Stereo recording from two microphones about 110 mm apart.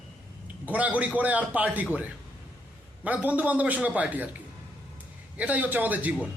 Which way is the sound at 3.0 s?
15° right (ahead or behind).